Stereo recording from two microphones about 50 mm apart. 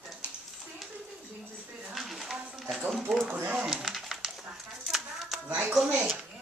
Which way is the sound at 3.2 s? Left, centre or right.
Right.